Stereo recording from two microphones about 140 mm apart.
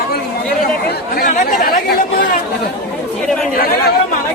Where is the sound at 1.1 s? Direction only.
70° left (ahead or behind).